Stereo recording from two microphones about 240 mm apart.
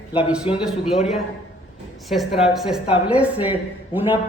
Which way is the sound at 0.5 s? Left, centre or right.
Left.